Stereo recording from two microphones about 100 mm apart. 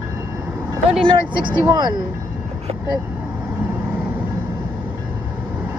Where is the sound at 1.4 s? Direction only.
50° right (ahead or behind).